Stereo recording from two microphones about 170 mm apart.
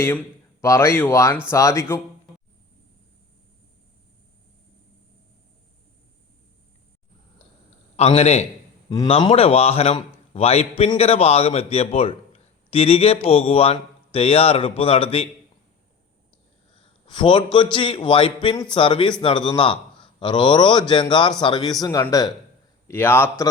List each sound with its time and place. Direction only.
0.0 s a man's voice: 15° left (ahead or behind)
7.9 s a man's voice: 40° left (ahead or behind)
8.9 s a man's voice: 20° left (ahead or behind)
9.1 s a man's voice: 35° left (ahead or behind)
17.1 s a man's voice: 30° left (ahead or behind); by 23.5 s 10° left (ahead or behind)